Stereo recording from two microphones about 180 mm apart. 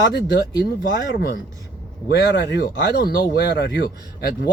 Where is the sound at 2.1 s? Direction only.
70° left (ahead or behind).